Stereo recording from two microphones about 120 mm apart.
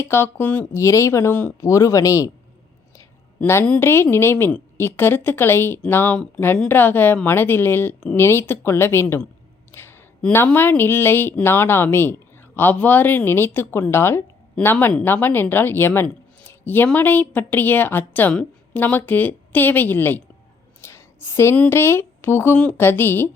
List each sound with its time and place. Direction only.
0.0 s speech: 20° left (ahead or behind)
0.8 s a woman's voice: 25° left (ahead or behind)
9.7 s a sound: 20° left (ahead or behind)
10.3 s a woman's voice: 15° left (ahead or behind)
20.8 s a sound: 20° left (ahead or behind)
21.5 s speech: 15° left (ahead or behind)